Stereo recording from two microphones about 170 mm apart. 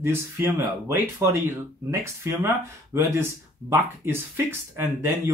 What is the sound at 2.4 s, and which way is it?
Speech, 15° right (ahead or behind).